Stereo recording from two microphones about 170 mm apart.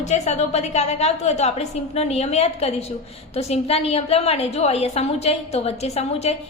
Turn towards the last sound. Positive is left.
turn(degrees=40)  # may be behind; listen again after turning